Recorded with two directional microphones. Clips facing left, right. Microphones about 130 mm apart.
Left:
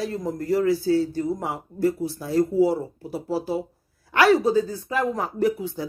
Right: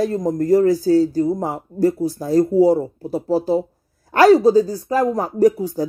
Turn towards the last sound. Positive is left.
turn(degrees=-40)  # may be behind; listen again after turning